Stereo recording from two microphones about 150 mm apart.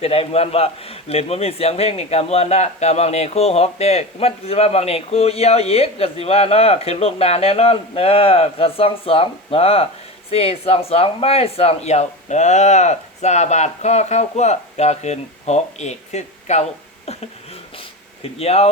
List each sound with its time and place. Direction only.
0.0 s a man's voice: 40° left (ahead or behind)
18.2 s a man's voice: 40° left (ahead or behind)